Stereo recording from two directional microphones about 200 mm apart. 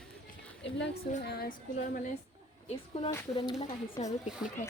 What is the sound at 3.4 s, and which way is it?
Speech, 30° left (ahead or behind).